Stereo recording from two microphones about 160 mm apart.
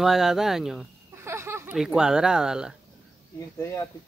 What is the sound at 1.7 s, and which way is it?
Speech, 5° right (ahead or behind).